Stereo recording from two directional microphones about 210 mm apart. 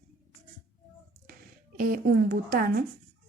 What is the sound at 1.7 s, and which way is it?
A woman's voice, 40° right (ahead or behind).